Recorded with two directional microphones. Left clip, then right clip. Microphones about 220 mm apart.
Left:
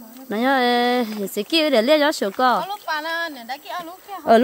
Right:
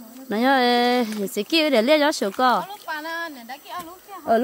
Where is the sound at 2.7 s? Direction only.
45° left (ahead or behind).